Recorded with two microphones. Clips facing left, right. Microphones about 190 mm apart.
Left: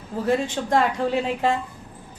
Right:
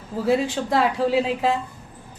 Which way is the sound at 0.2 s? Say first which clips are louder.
Right 2 dB; 5° right (ahead or behind).